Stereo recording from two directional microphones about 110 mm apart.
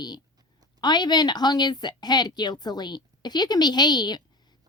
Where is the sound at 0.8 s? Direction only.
40° left (ahead or behind).